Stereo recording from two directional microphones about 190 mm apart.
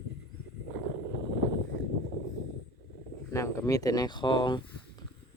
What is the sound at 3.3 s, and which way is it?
Speech, 15° left (ahead or behind).